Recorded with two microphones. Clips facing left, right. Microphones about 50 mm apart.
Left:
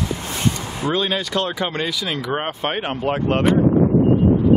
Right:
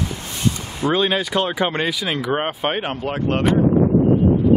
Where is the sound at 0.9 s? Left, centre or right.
Centre.